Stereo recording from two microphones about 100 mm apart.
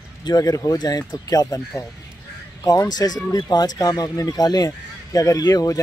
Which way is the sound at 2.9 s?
40° left (ahead or behind).